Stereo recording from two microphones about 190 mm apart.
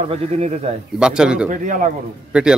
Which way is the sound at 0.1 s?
35° right (ahead or behind).